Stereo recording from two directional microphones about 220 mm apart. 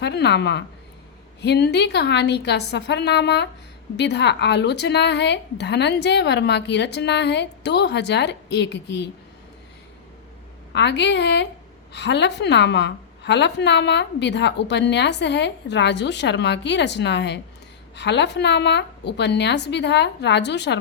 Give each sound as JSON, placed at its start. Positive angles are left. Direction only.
{"t": 0.0, "sound": "a woman's voice", "side_deg": 50}
{"t": 10.7, "sound": "a woman's voice", "side_deg": 50}